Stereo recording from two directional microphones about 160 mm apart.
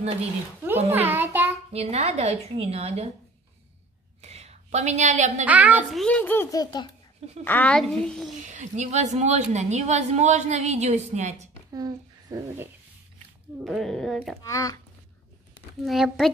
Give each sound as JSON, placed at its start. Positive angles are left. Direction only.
{"t": 0.9, "sound": "a child's voice", "side_deg": -10}
{"t": 1.7, "sound": "a woman's voice", "side_deg": -40}
{"t": 4.2, "sound": "whispering", "side_deg": -45}
{"t": 5.4, "sound": "a child's voice", "side_deg": -10}
{"t": 5.9, "sound": "a child's voice", "side_deg": 5}
{"t": 7.4, "sound": "a child's voice", "side_deg": 10}
{"t": 8.4, "sound": "a woman's voice", "side_deg": -50}
{"t": 11.7, "sound": "a child's voice", "side_deg": -25}
{"t": 13.7, "sound": "a child's voice", "side_deg": 0}
{"t": 14.4, "sound": "speech", "side_deg": 20}
{"t": 15.8, "sound": "a child's voice", "side_deg": 0}